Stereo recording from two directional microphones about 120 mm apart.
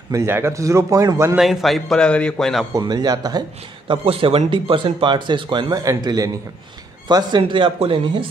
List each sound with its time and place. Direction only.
0.1 s speech: 20° right (ahead or behind)
1.3 s a man's voice: centre (ahead or behind)
2.7 s speech: 35° right (ahead or behind)
3.8 s speech: 50° right (ahead or behind)